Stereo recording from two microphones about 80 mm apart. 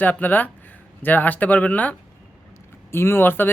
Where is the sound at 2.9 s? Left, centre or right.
Left.